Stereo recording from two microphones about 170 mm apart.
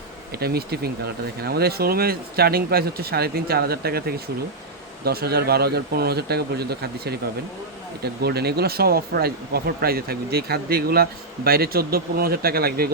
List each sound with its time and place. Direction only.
0.3 s speech: 70° right (ahead or behind)